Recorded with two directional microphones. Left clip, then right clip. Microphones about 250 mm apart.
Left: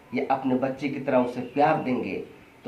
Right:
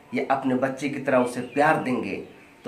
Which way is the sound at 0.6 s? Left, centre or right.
Right.